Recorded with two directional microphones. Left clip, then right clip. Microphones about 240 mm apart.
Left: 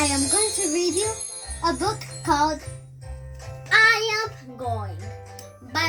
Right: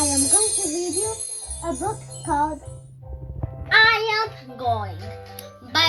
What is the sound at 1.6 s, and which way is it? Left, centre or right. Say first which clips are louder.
Speech: left 3 dB; centre.